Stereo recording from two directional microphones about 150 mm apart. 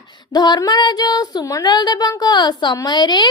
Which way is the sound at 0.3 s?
30° left (ahead or behind).